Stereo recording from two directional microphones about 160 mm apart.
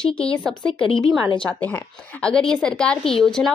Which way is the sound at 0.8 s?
30° left (ahead or behind).